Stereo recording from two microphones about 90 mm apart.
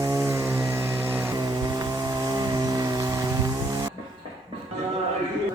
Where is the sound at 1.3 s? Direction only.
45° right (ahead or behind).